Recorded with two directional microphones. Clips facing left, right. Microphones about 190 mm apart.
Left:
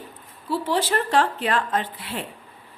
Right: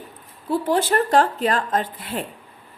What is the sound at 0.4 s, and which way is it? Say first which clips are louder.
A woman's voice: right 3 dB; 50° right (ahead or behind).